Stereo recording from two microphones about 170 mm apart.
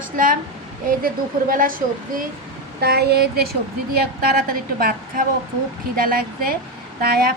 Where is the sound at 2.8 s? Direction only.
70° right (ahead or behind).